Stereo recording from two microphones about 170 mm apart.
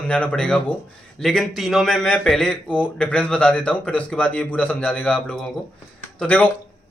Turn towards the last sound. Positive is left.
turn(degrees=10)  # may be behind; listen again after turning